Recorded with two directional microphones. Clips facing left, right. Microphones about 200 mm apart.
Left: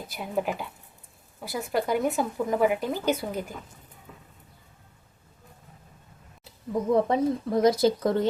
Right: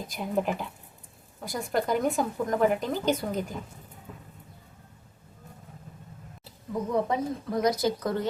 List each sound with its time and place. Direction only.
0.1 s a woman's voice: 5° left (ahead or behind)
6.9 s speech: 30° left (ahead or behind)